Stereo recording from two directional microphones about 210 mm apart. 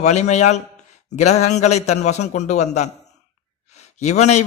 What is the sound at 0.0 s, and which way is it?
A man's voice, 35° left (ahead or behind).